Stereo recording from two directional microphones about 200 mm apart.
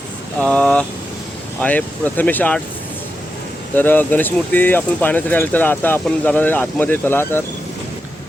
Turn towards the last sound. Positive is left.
turn(degrees=10)  # may be behind; listen again after turning